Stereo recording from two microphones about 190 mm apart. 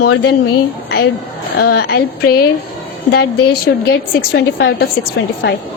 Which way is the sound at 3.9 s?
55° left (ahead or behind).